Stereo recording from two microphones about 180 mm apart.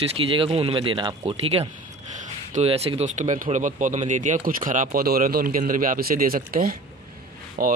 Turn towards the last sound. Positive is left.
turn(degrees=-50)  # may be behind; listen again after turning